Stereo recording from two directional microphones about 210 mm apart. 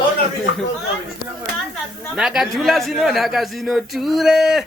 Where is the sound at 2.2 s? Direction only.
Centre (ahead or behind).